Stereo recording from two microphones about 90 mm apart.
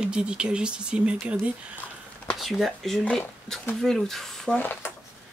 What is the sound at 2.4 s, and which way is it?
Speech, centre (ahead or behind).